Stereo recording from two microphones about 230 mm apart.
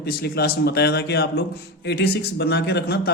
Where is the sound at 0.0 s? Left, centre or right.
Left.